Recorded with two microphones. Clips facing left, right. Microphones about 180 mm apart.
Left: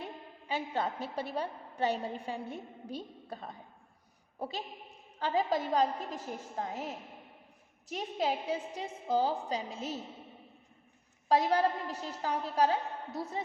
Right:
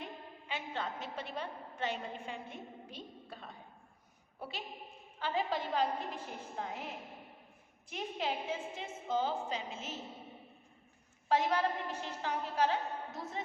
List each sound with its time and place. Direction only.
0.0 s a woman's voice: 40° left (ahead or behind)
11.3 s a woman's voice: 35° left (ahead or behind)